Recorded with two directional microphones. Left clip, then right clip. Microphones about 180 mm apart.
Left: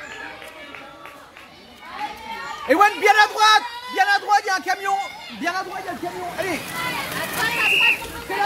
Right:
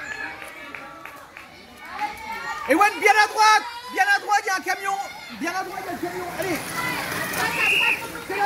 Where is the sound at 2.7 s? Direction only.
20° left (ahead or behind).